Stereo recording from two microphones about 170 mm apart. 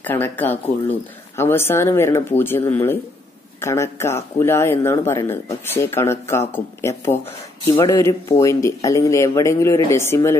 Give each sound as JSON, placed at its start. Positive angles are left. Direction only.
{"t": 0.0, "sound": "speech", "side_deg": 10}